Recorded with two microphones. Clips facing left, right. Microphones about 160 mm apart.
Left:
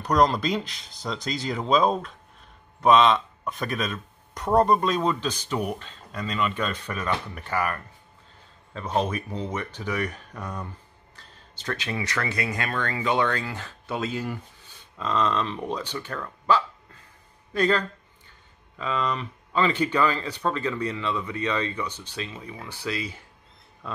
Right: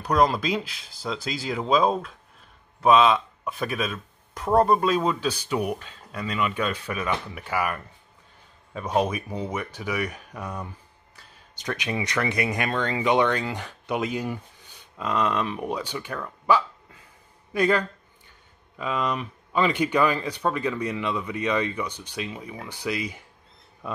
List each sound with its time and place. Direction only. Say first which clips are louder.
0.0 s speech: even; 5° right (ahead or behind)